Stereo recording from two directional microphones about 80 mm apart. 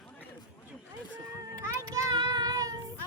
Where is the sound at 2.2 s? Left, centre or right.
Right.